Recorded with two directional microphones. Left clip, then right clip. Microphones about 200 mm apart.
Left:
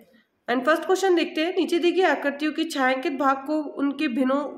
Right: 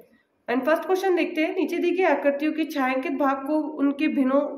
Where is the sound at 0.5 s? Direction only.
25° left (ahead or behind).